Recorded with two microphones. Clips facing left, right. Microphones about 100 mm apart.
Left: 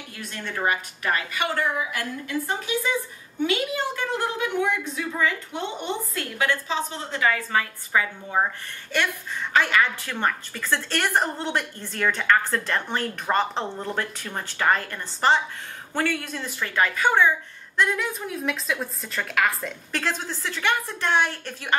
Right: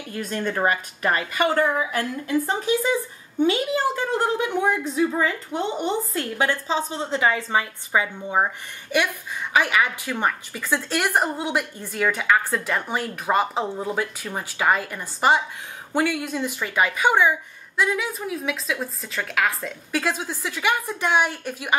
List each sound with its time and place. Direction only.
0.1 s a woman's voice: 40° right (ahead or behind); by 21.7 s 10° right (ahead or behind)